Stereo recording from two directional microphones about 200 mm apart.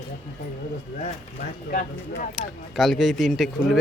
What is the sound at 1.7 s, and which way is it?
Speech, 40° left (ahead or behind).